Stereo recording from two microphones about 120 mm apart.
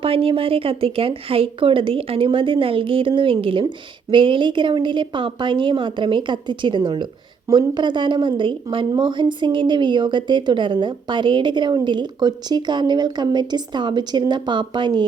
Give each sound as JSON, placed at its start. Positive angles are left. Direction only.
{"t": 0.0, "sound": "a woman's voice", "side_deg": -50}